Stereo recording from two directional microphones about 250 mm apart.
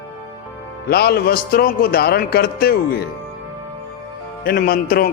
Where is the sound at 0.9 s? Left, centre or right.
Left.